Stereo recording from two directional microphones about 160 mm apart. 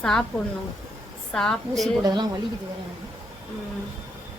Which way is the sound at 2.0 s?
25° right (ahead or behind).